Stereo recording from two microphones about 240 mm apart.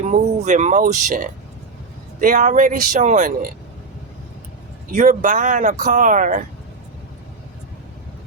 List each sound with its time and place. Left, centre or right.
0.0 s speech: right
4.9 s speech: right